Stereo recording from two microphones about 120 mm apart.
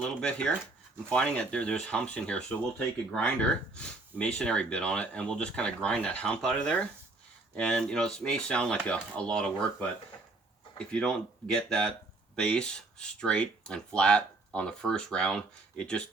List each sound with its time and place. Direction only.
0.0 s speech: 10° left (ahead or behind)
10.9 s speech: 5° left (ahead or behind)